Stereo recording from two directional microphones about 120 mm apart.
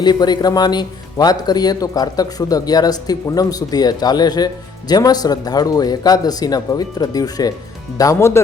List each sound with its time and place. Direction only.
0.0 s speech: 35° left (ahead or behind)